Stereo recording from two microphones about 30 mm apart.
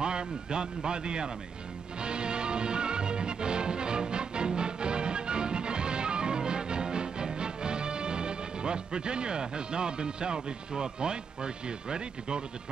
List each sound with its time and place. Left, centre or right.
0.0 s speech: right
2.0 s music: right